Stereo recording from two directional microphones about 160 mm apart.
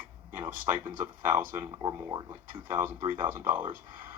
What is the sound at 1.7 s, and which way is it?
Speech, 25° right (ahead or behind).